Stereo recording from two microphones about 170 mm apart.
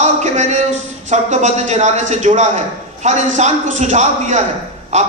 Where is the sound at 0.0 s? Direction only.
40° right (ahead or behind).